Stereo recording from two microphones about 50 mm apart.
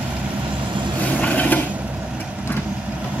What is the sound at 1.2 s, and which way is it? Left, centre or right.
Vehicle, left.